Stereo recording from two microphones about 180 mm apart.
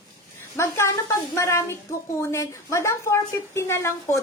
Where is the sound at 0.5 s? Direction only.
15° left (ahead or behind).